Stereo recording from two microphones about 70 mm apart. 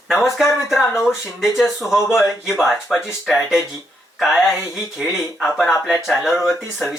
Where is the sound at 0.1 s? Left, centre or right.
Centre.